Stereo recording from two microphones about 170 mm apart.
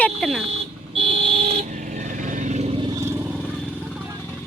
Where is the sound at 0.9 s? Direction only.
30° right (ahead or behind).